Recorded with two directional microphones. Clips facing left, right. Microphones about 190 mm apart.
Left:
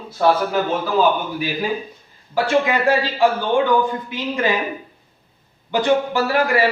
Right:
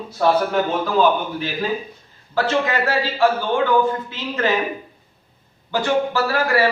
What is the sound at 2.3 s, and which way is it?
A man's voice, 10° left (ahead or behind).